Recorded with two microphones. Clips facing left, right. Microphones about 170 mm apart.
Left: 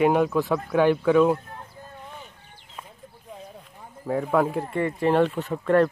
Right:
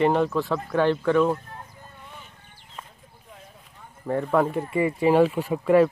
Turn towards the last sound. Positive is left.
turn(degrees=-10)  # may be behind; listen again after turning